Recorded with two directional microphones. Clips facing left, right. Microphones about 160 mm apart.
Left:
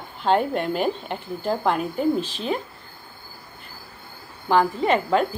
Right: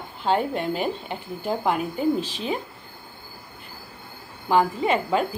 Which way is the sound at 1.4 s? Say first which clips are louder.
Left 1 dB; 10° right (ahead or behind).